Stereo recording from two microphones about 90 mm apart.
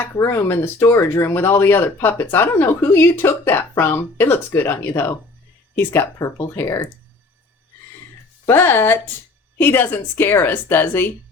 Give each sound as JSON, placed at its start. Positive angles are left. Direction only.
{"t": 0.2, "sound": "speech", "side_deg": 35}
{"t": 6.1, "sound": "speech", "side_deg": 35}
{"t": 8.4, "sound": "speech", "side_deg": 25}